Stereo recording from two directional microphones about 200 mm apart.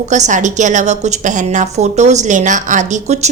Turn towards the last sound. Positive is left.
turn(degrees=-35)  # may be behind; listen again after turning